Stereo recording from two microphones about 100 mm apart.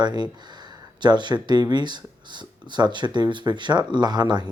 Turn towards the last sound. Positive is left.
turn(degrees=-45)  # may be behind; listen again after turning